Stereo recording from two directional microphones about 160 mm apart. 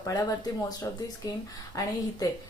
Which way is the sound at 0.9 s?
20° left (ahead or behind).